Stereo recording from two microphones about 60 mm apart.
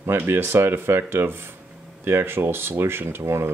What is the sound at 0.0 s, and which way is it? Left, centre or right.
Speech, right.